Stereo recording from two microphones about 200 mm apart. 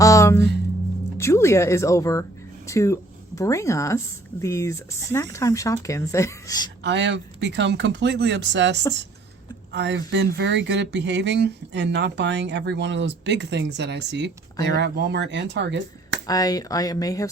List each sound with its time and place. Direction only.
0.0 s music: 15° left (ahead or behind)
1.2 s a woman's voice: 15° left (ahead or behind)
6.8 s speech: 60° right (ahead or behind)
16.2 s a woman's voice: 20° left (ahead or behind)